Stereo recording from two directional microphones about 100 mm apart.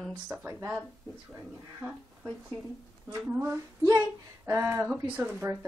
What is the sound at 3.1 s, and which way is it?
Speech, 25° right (ahead or behind).